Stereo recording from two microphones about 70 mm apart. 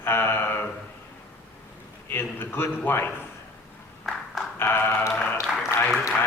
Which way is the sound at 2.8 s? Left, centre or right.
Left.